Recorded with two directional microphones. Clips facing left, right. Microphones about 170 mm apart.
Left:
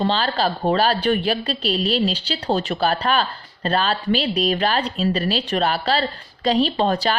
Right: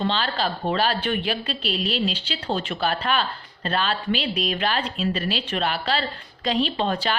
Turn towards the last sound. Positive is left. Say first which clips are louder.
# left 4 dB
turn(degrees=40)  # may be behind; listen again after turning